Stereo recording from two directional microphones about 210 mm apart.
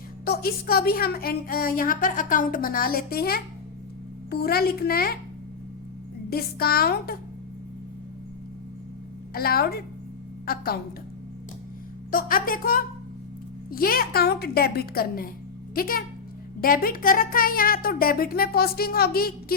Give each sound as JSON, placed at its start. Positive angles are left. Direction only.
{"t": 0.3, "sound": "a woman's voice", "side_deg": 45}
{"t": 6.3, "sound": "a woman's voice", "side_deg": 45}
{"t": 9.3, "sound": "a woman's voice", "side_deg": 45}
{"t": 12.1, "sound": "a woman's voice", "side_deg": 45}